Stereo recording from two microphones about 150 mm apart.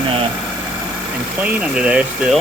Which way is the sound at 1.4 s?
10° right (ahead or behind).